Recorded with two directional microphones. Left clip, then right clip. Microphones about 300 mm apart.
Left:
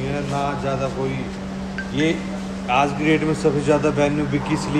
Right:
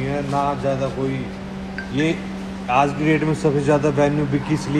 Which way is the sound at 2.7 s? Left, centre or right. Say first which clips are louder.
Right 1 dB; right.